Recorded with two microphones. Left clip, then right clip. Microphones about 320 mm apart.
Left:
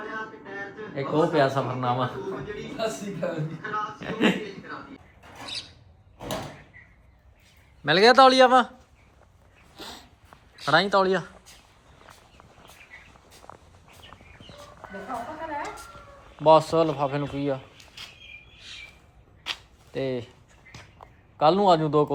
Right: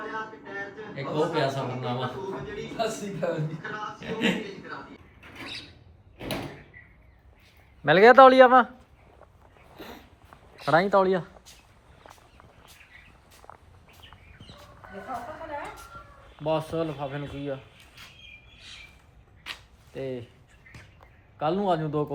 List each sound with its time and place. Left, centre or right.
0.0 s a man's voice: centre
7.9 s a man's voice: centre
10.7 s a man's voice: centre
13.5 s a sound: centre
16.5 s speech: centre
19.5 s a sound: left
21.3 s speech: left